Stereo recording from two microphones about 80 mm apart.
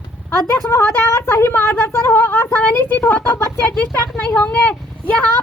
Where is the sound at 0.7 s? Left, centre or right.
Left.